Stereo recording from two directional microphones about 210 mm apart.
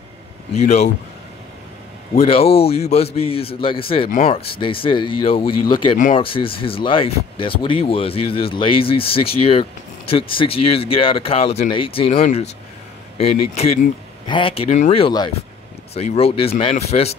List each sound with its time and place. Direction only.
0.6 s speech: 30° left (ahead or behind)
2.1 s speech: 25° left (ahead or behind)